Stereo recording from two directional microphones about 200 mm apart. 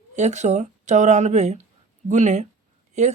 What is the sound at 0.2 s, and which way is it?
A woman's voice, 35° right (ahead or behind).